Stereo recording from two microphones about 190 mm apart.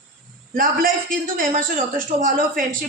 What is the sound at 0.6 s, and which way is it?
Speech, 50° right (ahead or behind).